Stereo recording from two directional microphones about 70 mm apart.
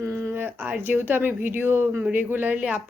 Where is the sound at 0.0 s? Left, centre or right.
Right.